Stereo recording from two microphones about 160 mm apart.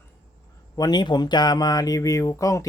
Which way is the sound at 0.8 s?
25° left (ahead or behind).